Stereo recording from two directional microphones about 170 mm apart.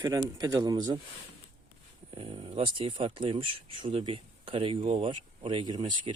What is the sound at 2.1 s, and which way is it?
Speech, 30° right (ahead or behind).